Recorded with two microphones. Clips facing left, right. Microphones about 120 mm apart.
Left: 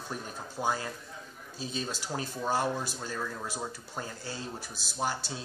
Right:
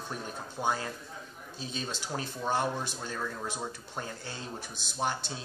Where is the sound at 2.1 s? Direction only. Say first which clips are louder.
Even; 5° left (ahead or behind).